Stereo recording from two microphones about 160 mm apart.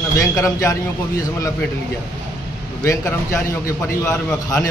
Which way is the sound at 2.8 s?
15° left (ahead or behind).